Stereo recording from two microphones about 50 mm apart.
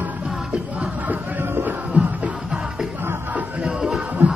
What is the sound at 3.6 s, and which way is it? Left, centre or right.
Music, centre.